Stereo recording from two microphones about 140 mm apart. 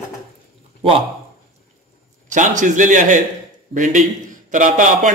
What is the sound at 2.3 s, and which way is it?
A man's voice, 65° right (ahead or behind).